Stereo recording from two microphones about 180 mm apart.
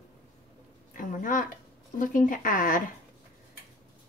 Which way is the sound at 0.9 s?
45° left (ahead or behind).